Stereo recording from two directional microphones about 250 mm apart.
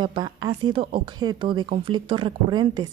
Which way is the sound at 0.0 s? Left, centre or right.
Centre.